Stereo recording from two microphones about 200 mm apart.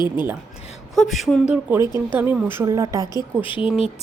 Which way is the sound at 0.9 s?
Centre (ahead or behind).